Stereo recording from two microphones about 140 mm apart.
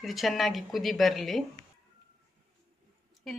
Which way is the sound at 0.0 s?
Centre (ahead or behind).